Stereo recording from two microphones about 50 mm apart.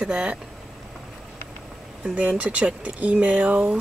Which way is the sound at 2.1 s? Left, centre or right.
Right.